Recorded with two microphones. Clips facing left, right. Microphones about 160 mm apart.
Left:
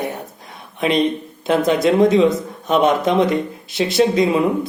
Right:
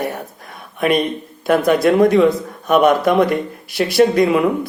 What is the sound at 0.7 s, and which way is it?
A man's voice, 20° left (ahead or behind).